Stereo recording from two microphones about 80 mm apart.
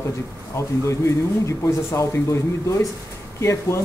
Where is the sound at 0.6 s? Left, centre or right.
Left.